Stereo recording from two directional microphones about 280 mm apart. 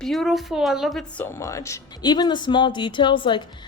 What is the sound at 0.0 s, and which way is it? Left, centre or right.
A woman's voice, centre.